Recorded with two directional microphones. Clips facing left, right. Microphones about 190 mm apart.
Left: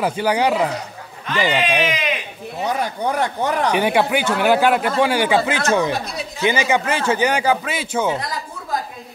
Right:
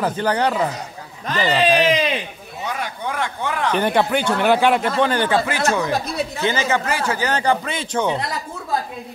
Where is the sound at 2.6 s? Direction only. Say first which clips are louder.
Left 5 dB; 35° left (ahead or behind).